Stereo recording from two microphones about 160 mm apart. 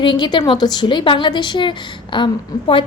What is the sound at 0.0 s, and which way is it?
A woman's voice, 30° left (ahead or behind).